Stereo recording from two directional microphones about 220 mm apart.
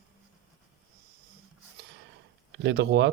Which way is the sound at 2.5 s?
50° right (ahead or behind).